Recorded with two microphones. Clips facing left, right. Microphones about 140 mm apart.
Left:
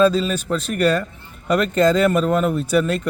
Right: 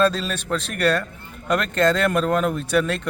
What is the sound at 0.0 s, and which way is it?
A man's voice, 10° left (ahead or behind).